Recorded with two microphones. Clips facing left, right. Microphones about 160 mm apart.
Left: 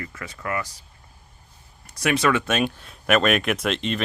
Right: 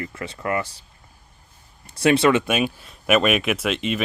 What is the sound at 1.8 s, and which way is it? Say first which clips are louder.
Speech: right 5 dB; 30° right (ahead or behind).